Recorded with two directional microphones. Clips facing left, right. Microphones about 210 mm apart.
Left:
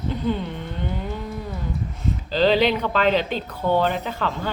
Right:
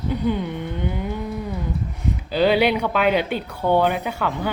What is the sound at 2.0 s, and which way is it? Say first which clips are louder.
Speech: right 1 dB; 10° right (ahead or behind).